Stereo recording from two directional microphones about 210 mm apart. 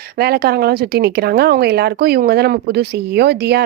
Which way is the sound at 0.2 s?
50° right (ahead or behind).